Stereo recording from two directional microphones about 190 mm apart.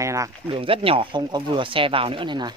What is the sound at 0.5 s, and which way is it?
Speech, 30° right (ahead or behind).